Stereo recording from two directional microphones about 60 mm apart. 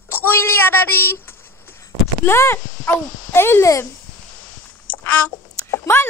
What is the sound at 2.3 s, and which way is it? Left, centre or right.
A child's voice, left.